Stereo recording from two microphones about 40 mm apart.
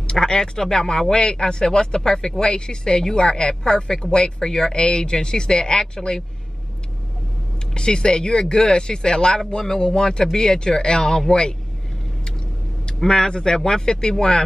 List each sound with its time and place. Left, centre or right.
0.0 s speech: centre
7.7 s speech: left
12.8 s speech: centre